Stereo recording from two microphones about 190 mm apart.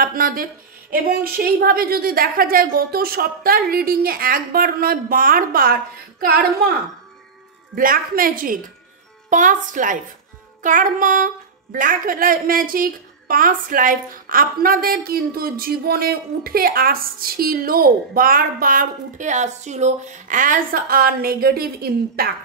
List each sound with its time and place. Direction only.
0.0 s a woman's voice: 50° right (ahead or behind)